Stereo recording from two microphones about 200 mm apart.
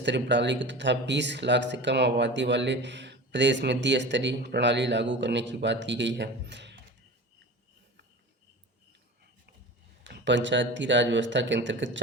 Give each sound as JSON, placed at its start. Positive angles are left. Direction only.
{"t": 0.0, "sound": "speech", "side_deg": -60}
{"t": 10.0, "sound": "speech", "side_deg": -65}